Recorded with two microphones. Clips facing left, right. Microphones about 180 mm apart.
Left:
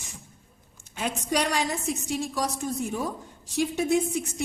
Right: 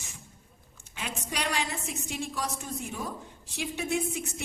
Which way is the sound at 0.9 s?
40° left (ahead or behind).